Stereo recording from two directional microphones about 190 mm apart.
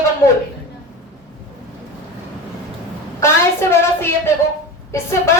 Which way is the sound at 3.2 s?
15° left (ahead or behind).